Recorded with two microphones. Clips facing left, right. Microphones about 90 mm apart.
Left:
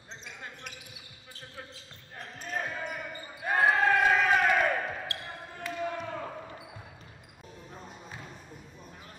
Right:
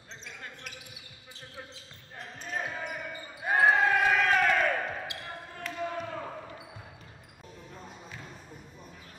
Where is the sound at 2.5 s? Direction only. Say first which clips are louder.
Left 1 dB; 10° right (ahead or behind).